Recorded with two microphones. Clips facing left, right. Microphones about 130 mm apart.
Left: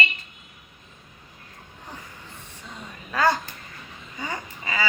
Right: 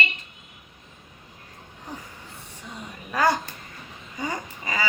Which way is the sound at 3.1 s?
15° right (ahead or behind).